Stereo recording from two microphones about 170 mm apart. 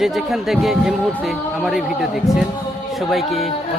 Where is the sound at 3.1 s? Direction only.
Centre (ahead or behind).